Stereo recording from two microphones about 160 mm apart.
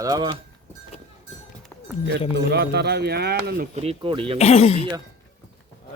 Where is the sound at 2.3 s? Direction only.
90° right.